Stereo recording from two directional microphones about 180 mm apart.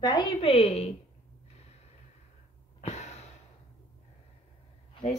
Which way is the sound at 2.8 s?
40° left (ahead or behind).